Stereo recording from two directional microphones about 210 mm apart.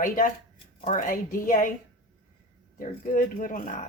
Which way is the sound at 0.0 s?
40° left (ahead or behind).